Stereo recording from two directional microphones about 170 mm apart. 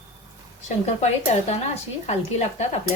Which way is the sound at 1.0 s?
40° left (ahead or behind).